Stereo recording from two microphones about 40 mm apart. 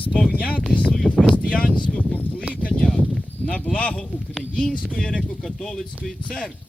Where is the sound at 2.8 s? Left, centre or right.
Centre.